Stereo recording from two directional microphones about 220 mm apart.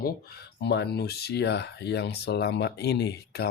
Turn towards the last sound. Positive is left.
turn(degrees=50)  # may be behind; listen again after turning